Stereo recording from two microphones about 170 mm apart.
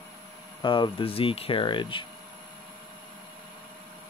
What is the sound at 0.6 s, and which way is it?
Speech, 30° left (ahead or behind).